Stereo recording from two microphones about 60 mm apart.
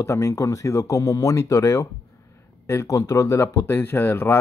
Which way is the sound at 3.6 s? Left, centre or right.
Left.